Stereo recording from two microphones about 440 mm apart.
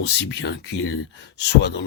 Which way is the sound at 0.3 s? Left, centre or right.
Left.